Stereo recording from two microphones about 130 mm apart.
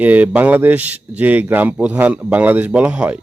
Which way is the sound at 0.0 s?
10° right (ahead or behind).